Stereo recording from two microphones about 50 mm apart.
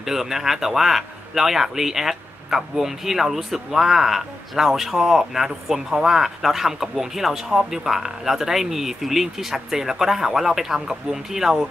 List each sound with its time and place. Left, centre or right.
0.0 s speech: centre